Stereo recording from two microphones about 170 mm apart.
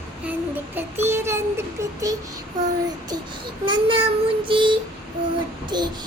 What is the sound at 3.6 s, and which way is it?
Child singing, 30° right (ahead or behind).